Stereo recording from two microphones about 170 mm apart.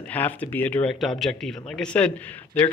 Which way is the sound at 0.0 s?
10° left (ahead or behind).